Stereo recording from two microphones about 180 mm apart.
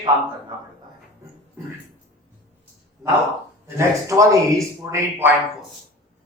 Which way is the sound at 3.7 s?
15° right (ahead or behind).